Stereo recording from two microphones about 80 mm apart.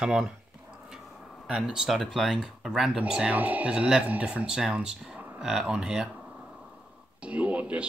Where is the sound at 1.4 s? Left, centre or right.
Centre.